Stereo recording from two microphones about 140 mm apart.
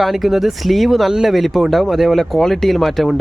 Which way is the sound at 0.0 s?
Centre (ahead or behind).